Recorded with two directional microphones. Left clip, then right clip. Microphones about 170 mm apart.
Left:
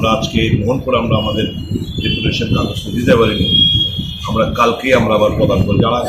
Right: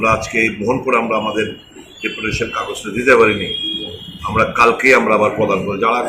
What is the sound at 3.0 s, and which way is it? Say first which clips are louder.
Speech: right 2 dB; 5° right (ahead or behind).